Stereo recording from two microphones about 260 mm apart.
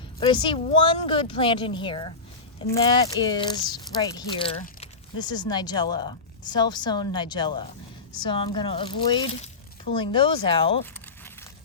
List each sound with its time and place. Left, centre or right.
0.2 s a woman's voice: centre